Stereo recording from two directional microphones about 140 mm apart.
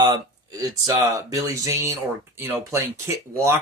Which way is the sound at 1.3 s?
25° right (ahead or behind).